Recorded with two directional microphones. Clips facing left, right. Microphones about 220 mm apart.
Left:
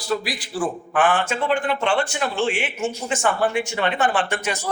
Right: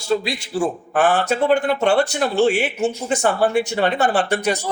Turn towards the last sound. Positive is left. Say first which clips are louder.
# right 4 dB
turn(degrees=-40)  # may be behind; listen again after turning